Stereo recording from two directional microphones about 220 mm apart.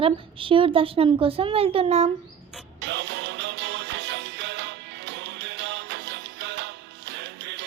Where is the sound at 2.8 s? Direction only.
50° right (ahead or behind).